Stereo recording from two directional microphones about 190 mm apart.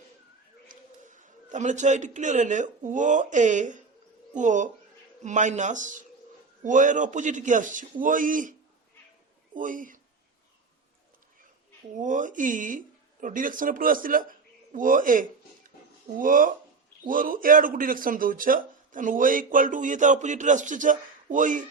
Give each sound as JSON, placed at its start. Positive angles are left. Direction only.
{"t": 0.7, "sound": "a sound", "side_deg": -40}
{"t": 2.1, "sound": "a man's voice", "side_deg": -40}
{"t": 9.6, "sound": "speech", "side_deg": -45}
{"t": 11.9, "sound": "a man's voice", "side_deg": -40}